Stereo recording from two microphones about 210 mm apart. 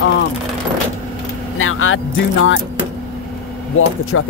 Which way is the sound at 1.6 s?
75° left (ahead or behind).